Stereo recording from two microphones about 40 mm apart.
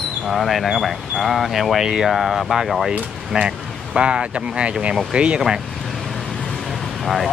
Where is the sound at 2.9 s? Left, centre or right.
Right.